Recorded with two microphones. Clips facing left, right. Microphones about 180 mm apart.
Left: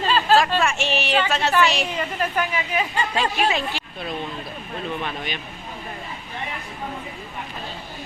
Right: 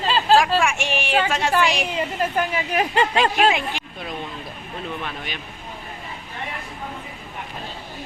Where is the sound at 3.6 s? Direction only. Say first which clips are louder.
Left 1 dB; 15° right (ahead or behind).